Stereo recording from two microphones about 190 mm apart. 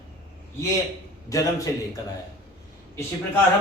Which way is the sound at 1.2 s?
15° left (ahead or behind).